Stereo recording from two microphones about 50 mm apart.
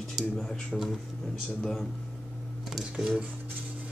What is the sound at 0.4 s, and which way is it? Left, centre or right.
Speech, centre.